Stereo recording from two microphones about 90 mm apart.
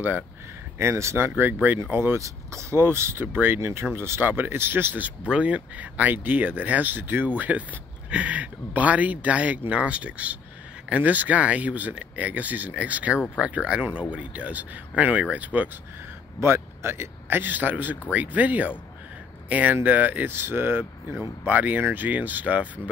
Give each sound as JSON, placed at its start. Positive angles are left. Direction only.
{"t": 0.7, "sound": "speech", "side_deg": -30}
{"t": 16.3, "sound": "speech", "side_deg": -30}